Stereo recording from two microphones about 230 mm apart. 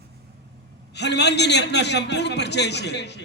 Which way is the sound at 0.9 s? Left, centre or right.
Left.